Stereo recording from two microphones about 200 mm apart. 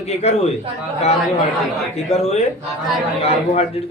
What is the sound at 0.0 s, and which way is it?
Speech, 35° left (ahead or behind).